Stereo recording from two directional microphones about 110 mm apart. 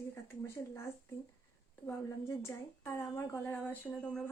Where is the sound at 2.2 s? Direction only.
25° left (ahead or behind).